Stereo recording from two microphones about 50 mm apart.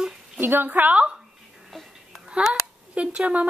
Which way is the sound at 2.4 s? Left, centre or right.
Right.